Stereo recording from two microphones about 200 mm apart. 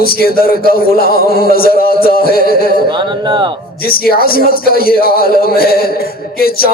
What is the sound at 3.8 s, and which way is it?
A man's voice, 50° left (ahead or behind).